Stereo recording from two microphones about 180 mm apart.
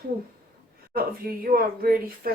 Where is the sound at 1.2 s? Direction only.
55° right (ahead or behind).